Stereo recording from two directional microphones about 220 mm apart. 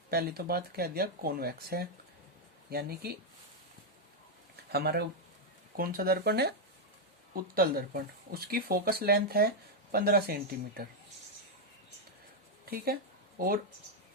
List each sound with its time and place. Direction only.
0.1 s speech: 45° right (ahead or behind)
4.7 s speech: 45° right (ahead or behind)
12.7 s speech: 45° right (ahead or behind)